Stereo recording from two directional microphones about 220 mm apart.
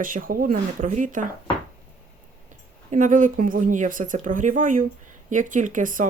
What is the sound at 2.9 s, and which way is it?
Speech, 35° right (ahead or behind).